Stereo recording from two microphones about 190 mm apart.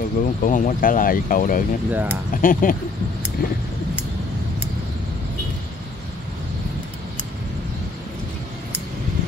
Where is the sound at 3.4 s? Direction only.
55° left (ahead or behind).